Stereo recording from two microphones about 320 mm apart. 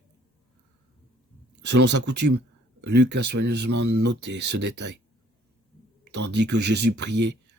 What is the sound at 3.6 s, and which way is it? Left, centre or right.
Speech, right.